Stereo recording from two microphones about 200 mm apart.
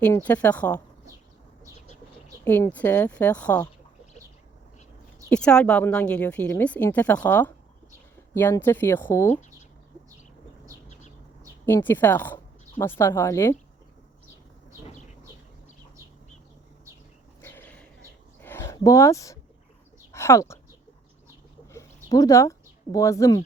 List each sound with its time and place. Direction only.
0.0 s a woman's voice: 10° left (ahead or behind)
2.4 s a woman's voice: 10° left (ahead or behind)
5.3 s a woman's voice: 5° left (ahead or behind)
11.6 s a woman's voice: 10° left (ahead or behind)
17.4 s a sound: 10° left (ahead or behind)
20.1 s speech: 15° left (ahead or behind)
21.7 s a sound: 15° left (ahead or behind)